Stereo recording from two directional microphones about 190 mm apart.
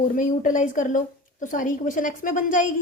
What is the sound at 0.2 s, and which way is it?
A woman's voice, 45° left (ahead or behind).